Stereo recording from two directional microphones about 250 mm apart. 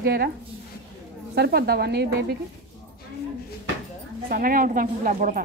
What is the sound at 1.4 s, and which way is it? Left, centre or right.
Speech, right.